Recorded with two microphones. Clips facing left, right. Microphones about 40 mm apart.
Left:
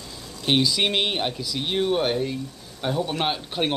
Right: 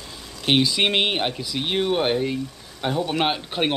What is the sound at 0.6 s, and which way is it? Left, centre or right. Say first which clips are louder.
Speech: right 2 dB; centre.